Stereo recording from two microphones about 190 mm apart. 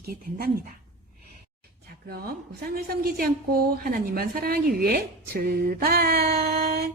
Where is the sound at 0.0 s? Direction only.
50° right (ahead or behind).